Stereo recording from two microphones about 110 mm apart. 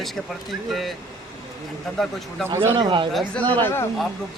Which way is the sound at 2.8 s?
50° right (ahead or behind).